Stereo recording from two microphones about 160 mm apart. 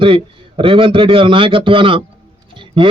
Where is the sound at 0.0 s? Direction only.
35° right (ahead or behind).